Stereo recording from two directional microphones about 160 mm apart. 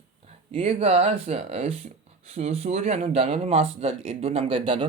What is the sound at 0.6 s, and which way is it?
Speech, 40° right (ahead or behind).